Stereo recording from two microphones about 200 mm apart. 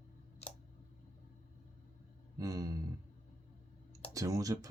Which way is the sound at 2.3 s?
15° right (ahead or behind).